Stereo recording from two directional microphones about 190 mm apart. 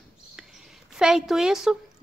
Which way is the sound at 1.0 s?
Centre (ahead or behind).